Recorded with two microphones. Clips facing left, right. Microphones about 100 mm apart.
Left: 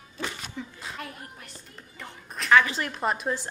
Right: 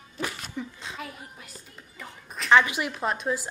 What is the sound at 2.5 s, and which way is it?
Speech, 20° right (ahead or behind).